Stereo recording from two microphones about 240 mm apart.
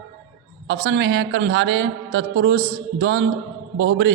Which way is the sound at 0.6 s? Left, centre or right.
Right.